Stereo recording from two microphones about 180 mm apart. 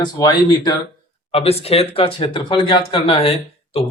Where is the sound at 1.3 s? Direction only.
35° left (ahead or behind).